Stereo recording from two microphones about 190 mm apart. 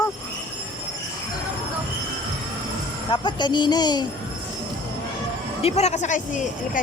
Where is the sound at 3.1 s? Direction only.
25° left (ahead or behind).